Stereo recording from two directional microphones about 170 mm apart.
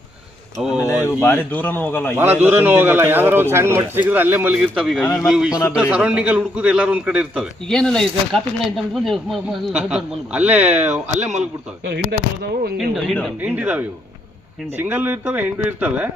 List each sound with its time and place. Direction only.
0.6 s speech: 5° right (ahead or behind)
1.0 s speech: 10° left (ahead or behind)
2.1 s a man's voice: 10° right (ahead or behind)
11.2 s a man's voice: 40° right (ahead or behind)
11.9 s speech: 65° right (ahead or behind)
12.7 s speech: centre (ahead or behind)
13.4 s a man's voice: 10° right (ahead or behind)